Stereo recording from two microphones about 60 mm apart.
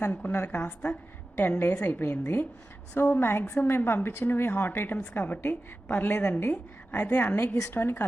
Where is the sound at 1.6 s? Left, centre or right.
Left.